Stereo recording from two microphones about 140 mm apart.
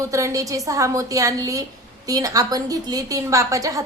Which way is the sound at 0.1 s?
25° right (ahead or behind).